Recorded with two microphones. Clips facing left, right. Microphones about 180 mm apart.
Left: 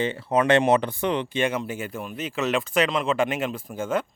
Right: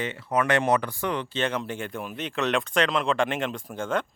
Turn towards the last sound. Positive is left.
turn(degrees=5)  # may be behind; listen again after turning